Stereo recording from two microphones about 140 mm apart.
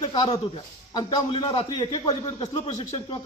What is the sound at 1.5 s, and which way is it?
A man's voice, 45° left (ahead or behind).